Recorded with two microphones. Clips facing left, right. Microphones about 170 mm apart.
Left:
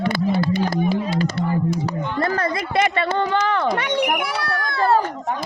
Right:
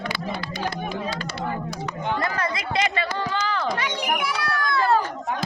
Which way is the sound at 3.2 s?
60° left (ahead or behind).